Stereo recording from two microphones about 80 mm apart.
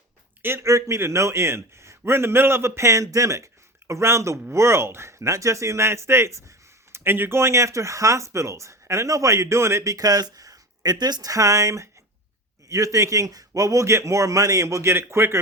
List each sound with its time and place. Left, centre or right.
0.4 s a man's voice: right